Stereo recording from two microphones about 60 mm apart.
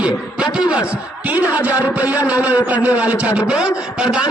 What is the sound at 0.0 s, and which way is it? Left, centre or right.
Speech, centre.